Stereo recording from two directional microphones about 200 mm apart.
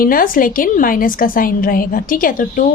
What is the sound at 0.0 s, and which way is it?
A woman's voice, 45° left (ahead or behind).